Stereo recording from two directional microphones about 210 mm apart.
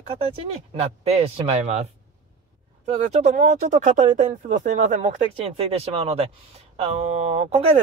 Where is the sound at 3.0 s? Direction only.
35° right (ahead or behind).